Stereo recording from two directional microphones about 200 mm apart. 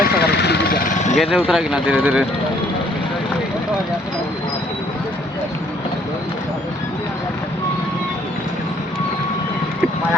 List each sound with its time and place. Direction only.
0.0 s vehicle: 55° left (ahead or behind)
0.9 s vehicle: 35° left (ahead or behind)
1.5 s speech: 5° right (ahead or behind)